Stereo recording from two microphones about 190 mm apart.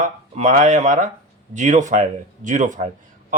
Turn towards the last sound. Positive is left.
turn(degrees=-40)  # may be behind; listen again after turning